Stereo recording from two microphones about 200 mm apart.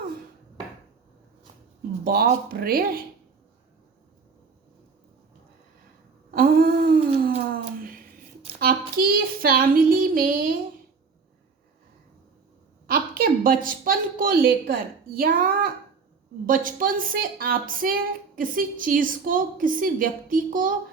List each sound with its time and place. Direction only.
2.0 s a woman's voice: 50° right (ahead or behind)
6.3 s humming: 45° right (ahead or behind)
7.6 s a sound: 45° right (ahead or behind)
9.0 s speech: 45° right (ahead or behind)
12.9 s a woman's voice: 45° right (ahead or behind)